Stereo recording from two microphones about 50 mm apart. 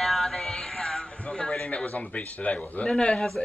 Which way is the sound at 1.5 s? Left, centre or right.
Centre.